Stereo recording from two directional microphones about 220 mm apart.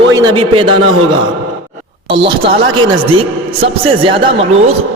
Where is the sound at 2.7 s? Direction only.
20° right (ahead or behind).